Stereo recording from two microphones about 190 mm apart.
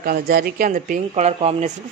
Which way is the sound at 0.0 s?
50° right (ahead or behind).